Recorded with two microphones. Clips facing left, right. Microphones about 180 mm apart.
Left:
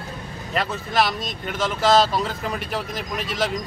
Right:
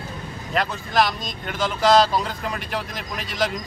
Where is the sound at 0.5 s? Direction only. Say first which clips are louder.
Right 1 dB; centre (ahead or behind).